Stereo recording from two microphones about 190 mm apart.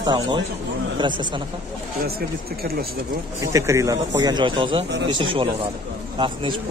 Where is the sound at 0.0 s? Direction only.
20° right (ahead or behind).